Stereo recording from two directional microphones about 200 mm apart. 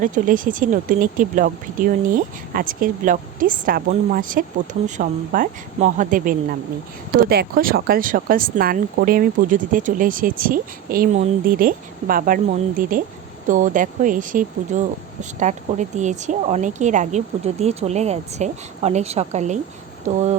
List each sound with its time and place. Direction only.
0.0 s speech: 40° right (ahead or behind)